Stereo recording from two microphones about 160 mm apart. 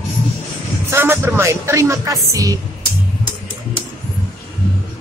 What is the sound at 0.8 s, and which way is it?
Speech, 15° right (ahead or behind).